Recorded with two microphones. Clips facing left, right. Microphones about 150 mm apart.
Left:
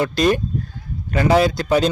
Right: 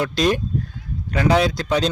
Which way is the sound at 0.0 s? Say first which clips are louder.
Left 2 dB; centre (ahead or behind).